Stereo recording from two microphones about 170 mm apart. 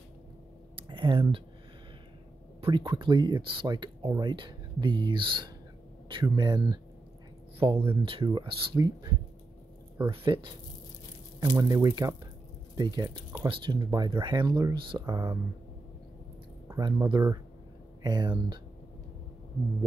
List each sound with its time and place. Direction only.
0.7 s a sound: 30° right (ahead or behind)
2.6 s speech: 25° right (ahead or behind)
16.6 s speech: 20° right (ahead or behind)